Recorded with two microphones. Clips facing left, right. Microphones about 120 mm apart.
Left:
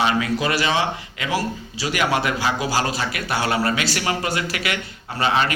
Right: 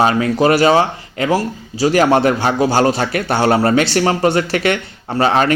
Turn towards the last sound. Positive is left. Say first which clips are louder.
# right 7 dB
turn(degrees=-40)  # may be behind; listen again after turning